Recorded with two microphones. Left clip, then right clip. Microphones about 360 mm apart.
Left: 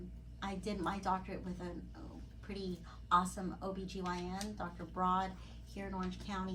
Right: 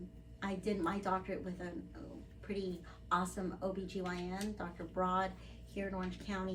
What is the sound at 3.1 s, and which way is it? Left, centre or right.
Speech, centre.